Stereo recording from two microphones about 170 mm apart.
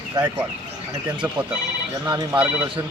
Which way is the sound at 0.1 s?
25° right (ahead or behind).